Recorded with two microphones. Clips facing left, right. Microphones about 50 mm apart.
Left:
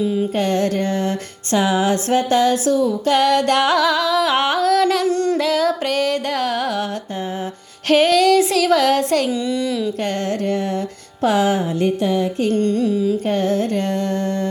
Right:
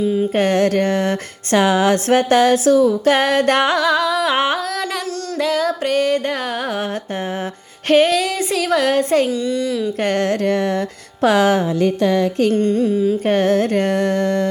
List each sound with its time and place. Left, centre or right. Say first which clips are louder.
0.0 s music: right 2 dB; centre
0.3 s a sound: right 5 dB; right
3.1 s music: right 1 dB; right
3.6 s a woman's voice: even; centre
5.0 s a sound: left 8 dB; left
5.4 s a woman's voice: even; centre
7.9 s a woman's voice: left 1 dB; centre
9.3 s speech: right 1 dB; centre
10.0 s a sound: right 4 dB; right
10.4 s music: right 3 dB; right
12.5 s music: right 1 dB; right
12.8 s carnatic music: right 2 dB; centre
13.2 s a sound: right 3 dB; right